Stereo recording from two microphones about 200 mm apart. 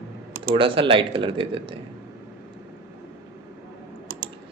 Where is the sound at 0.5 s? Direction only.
25° right (ahead or behind).